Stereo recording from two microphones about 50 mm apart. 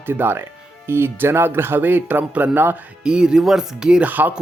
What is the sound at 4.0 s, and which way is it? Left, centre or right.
Speech, right.